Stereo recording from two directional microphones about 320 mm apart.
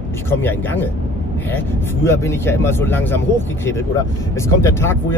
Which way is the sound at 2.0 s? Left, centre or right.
Centre.